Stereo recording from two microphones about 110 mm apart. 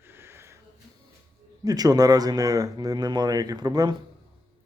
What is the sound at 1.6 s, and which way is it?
Speech, 35° right (ahead or behind).